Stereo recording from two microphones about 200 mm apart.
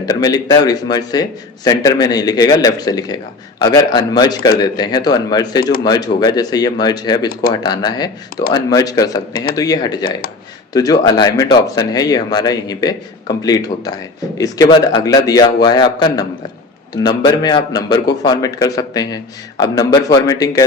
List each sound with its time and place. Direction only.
0.0 s speech: 20° left (ahead or behind)